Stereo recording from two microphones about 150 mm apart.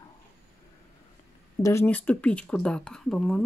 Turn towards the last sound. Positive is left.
turn(degrees=5)  # may be behind; listen again after turning